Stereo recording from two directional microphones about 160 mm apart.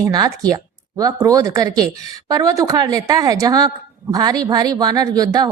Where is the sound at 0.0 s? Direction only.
25° right (ahead or behind).